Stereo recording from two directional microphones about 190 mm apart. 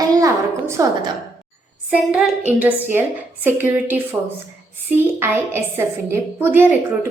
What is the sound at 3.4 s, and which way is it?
Speech, 10° right (ahead or behind).